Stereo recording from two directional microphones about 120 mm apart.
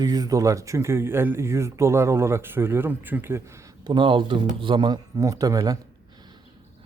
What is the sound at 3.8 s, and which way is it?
Speech, 40° right (ahead or behind).